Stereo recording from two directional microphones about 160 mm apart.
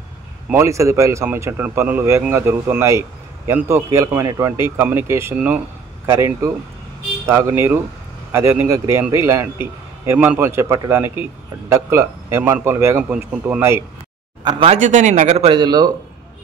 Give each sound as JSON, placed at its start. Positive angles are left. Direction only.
{"t": 0.5, "sound": "a man's voice", "side_deg": -20}
{"t": 14.4, "sound": "speech", "side_deg": -25}
{"t": 14.7, "sound": "a man's voice", "side_deg": -50}